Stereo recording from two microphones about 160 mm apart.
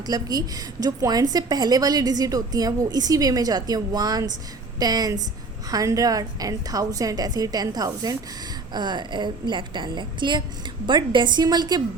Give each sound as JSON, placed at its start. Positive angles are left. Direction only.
{"t": 0.0, "sound": "a woman's voice", "side_deg": -25}